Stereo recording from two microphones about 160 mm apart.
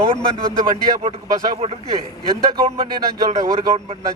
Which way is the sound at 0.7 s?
40° right (ahead or behind).